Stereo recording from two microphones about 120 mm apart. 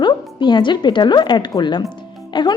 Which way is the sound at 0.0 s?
40° left (ahead or behind).